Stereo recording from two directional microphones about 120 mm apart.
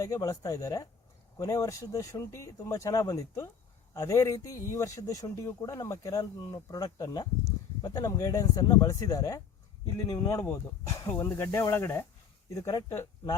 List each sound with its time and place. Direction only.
0.0 s speech: 30° left (ahead or behind)